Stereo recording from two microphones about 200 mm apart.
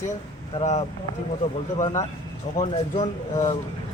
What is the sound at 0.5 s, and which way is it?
Speech, 35° left (ahead or behind).